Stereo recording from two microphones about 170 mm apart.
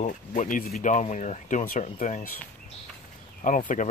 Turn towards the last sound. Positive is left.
turn(degrees=50)  # may be behind; listen again after turning